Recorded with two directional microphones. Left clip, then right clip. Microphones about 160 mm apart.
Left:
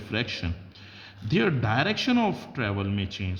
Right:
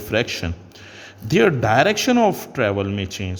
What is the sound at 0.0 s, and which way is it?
A man's voice, 45° right (ahead or behind).